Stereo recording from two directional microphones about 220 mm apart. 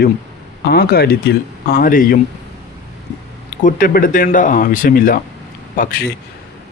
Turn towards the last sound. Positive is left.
turn(degrees=40)  # may be behind; listen again after turning